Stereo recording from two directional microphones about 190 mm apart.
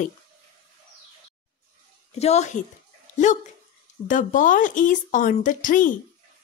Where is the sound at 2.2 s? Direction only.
35° left (ahead or behind).